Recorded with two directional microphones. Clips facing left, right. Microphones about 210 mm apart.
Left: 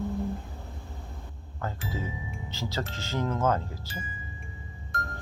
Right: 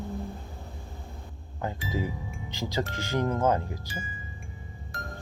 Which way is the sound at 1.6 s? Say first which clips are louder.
Right 3 dB; 15° right (ahead or behind).